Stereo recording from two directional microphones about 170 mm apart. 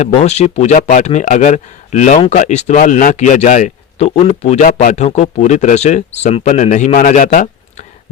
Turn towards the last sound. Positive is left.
turn(degrees=55)  # may be behind; listen again after turning